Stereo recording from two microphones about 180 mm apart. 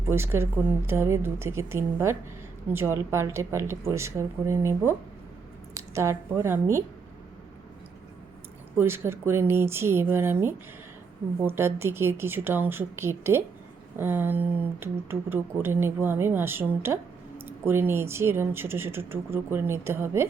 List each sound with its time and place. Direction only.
0.0 s speech: 15° right (ahead or behind)
8.8 s speech: 15° right (ahead or behind)